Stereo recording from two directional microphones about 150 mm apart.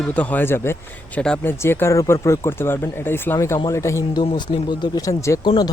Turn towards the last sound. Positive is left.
turn(degrees=30)  # may be behind; listen again after turning